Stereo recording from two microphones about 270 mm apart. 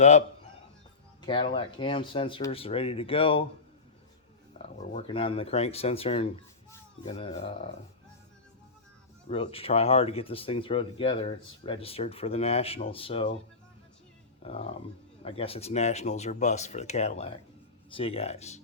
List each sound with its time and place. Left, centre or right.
1.2 s speech: centre
4.5 s speech: left
9.3 s speech: left
14.4 s speech: left